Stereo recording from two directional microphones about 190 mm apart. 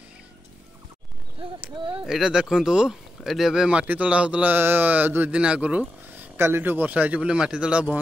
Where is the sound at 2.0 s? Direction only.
5° right (ahead or behind).